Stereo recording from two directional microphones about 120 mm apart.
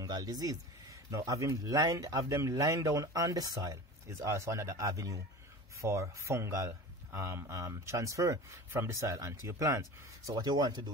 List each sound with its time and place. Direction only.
0.0 s speech: 30° right (ahead or behind)